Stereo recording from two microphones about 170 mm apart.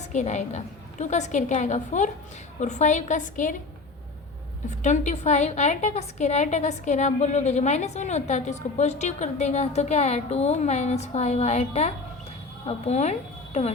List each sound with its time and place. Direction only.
0.1 s a woman's voice: 45° left (ahead or behind)
4.8 s a woman's voice: 45° left (ahead or behind)